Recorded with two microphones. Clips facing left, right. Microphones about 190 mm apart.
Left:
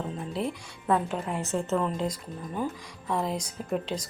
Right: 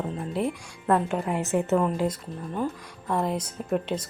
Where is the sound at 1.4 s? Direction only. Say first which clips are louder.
Right 4 dB; 15° right (ahead or behind).